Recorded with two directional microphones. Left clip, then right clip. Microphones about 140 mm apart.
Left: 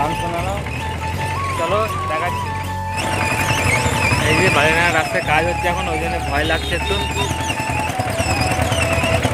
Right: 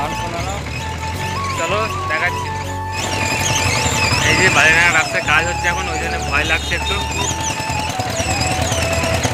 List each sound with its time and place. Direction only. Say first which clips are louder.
1.6 s speech: left 1 dB; centre (ahead or behind)
3.4 s alarm: even; 15° left (ahead or behind)
4.4 s speech: right 4 dB; 15° left (ahead or behind)